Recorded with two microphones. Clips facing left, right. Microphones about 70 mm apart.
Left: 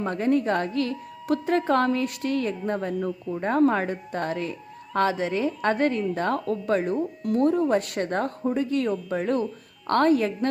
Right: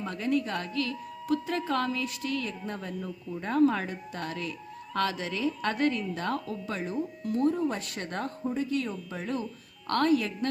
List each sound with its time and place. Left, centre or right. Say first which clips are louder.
0.0 s speech: left 6 dB; left